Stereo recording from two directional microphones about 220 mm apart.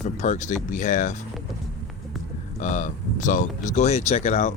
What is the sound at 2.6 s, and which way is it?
Speech, 35° left (ahead or behind).